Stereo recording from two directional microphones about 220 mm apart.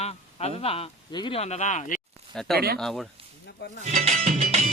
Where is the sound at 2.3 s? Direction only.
Centre (ahead or behind).